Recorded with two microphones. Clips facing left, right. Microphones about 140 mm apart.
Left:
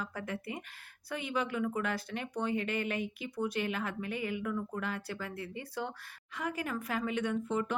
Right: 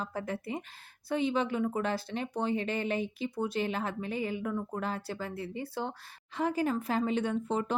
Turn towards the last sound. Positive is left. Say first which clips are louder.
# right 2 dB
turn(degrees=-30)  # may be behind; listen again after turning